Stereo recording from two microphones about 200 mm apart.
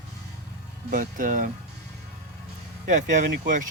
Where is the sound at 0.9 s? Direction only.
40° right (ahead or behind).